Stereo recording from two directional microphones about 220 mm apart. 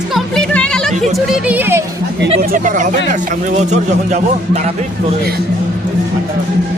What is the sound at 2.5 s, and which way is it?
A man's voice, 35° right (ahead or behind).